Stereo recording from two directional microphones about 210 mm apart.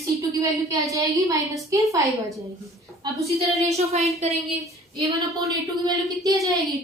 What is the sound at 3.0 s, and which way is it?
Speech, 20° right (ahead or behind).